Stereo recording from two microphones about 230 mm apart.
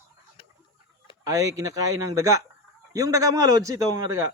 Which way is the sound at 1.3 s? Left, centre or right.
Centre.